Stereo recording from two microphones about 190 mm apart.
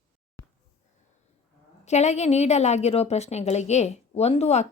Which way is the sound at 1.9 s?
35° left (ahead or behind).